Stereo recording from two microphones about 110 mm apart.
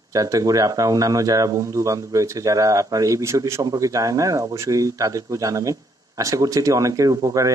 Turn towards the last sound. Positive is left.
turn(degrees=-30)  # may be behind; listen again after turning